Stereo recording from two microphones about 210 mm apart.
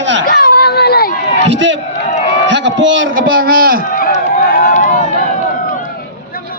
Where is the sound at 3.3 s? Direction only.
45° right (ahead or behind).